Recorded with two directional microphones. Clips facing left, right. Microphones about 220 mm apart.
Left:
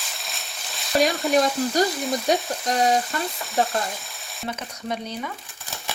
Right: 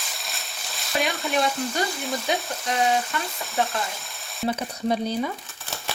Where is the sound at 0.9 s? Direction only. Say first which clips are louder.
Left 5 dB; 40° left (ahead or behind).